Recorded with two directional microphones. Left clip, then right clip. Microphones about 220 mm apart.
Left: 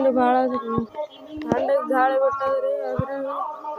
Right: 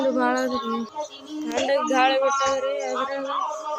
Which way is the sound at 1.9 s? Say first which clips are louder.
Right 1 dB; 15° right (ahead or behind).